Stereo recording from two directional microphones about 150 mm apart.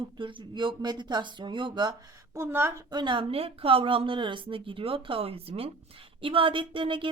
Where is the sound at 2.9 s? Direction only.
30° right (ahead or behind).